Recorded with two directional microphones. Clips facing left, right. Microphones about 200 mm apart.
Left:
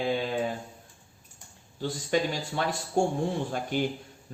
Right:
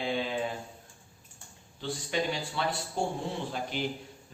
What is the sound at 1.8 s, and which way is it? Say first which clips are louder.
Speech: left 5 dB; 45° left (ahead or behind).